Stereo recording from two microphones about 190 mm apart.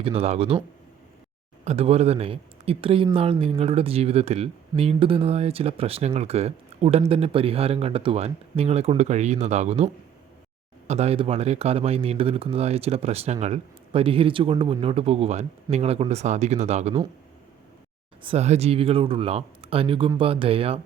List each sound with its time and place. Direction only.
0.0 s speech: 30° right (ahead or behind)
1.6 s speech: 35° right (ahead or behind)
18.3 s speech: 35° right (ahead or behind)